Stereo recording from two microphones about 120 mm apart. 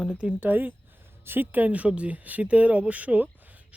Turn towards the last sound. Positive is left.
turn(degrees=-15)  # may be behind; listen again after turning